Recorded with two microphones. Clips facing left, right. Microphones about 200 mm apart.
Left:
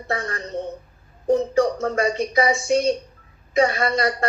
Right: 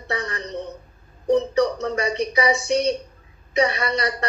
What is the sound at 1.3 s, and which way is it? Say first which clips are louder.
Speech: even; 50° left (ahead or behind).